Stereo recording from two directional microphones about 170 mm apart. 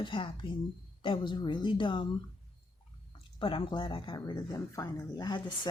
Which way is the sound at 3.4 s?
30° left (ahead or behind).